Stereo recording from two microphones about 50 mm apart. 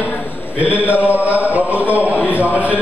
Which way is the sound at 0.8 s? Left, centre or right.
Left.